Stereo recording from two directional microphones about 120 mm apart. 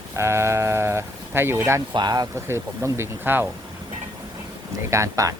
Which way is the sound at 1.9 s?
35° right (ahead or behind).